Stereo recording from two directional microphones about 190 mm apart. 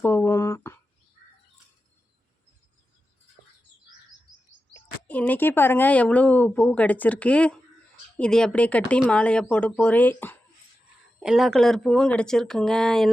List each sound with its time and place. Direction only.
0.0 s a sound: 15° left (ahead or behind)
5.0 s speech: 10° left (ahead or behind)
11.2 s speech: centre (ahead or behind)